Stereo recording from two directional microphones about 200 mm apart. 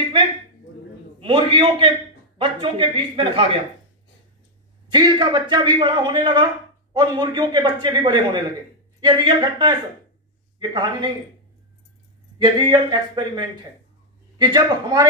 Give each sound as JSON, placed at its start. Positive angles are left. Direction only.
{"t": 1.2, "sound": "a man's voice", "side_deg": -25}
{"t": 4.9, "sound": "a man's voice", "side_deg": -20}
{"t": 12.4, "sound": "a man's voice", "side_deg": -20}